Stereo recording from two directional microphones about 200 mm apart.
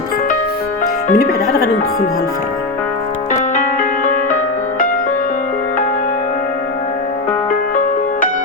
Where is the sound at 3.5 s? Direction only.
40° left (ahead or behind).